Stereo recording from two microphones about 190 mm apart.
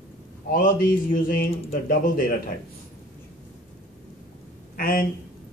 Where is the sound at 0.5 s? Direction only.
45° left (ahead or behind).